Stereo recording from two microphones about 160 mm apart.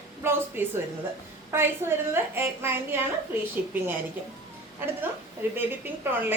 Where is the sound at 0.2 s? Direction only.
15° right (ahead or behind).